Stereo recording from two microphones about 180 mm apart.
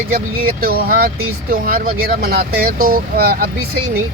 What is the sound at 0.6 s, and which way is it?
Speech, 55° right (ahead or behind).